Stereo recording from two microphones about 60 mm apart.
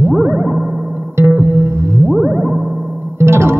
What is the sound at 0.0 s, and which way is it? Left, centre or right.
Music, right.